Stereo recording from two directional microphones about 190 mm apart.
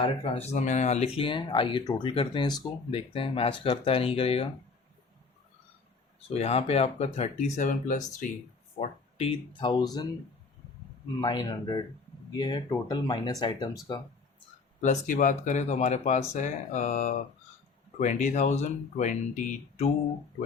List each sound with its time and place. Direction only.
0.0 s speech: 40° left (ahead or behind)
6.3 s speech: 35° left (ahead or behind)
8.8 s speech: 30° left (ahead or behind)
11.2 s speech: 20° left (ahead or behind)
14.8 s speech: 40° left (ahead or behind)